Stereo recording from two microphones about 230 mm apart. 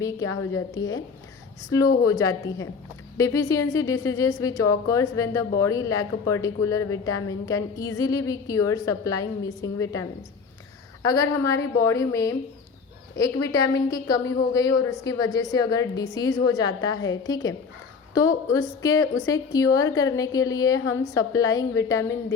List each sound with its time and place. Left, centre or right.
0.0 s a woman's voice: centre
11.0 s a woman's voice: centre